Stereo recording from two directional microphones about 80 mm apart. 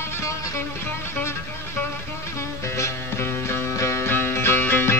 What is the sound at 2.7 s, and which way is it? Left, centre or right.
Music, left.